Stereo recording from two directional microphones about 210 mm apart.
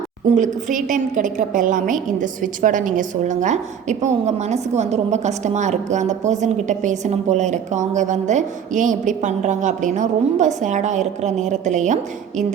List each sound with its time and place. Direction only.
0.3 s a woman's voice: 35° right (ahead or behind)